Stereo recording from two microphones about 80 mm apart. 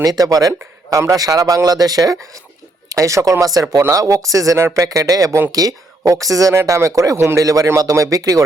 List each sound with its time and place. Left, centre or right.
0.0 s speech: right